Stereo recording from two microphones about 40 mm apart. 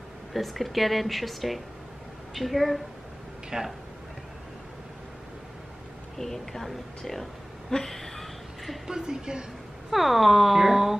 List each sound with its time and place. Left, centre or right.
0.3 s speech: centre
3.4 s speech: centre
6.1 s a woman's voice: centre
7.7 s a sound: centre
8.8 s speech: centre
9.8 s speech: centre